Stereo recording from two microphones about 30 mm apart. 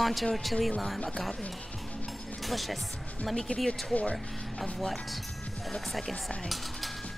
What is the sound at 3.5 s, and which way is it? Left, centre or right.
Speech, left.